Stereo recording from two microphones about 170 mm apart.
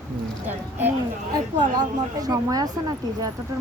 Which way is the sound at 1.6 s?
25° right (ahead or behind).